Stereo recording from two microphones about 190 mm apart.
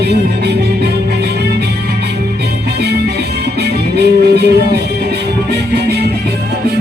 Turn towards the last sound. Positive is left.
turn(degrees=-60)  # may be behind; listen again after turning